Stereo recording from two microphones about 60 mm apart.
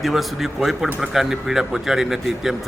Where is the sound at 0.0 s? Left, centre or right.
Centre.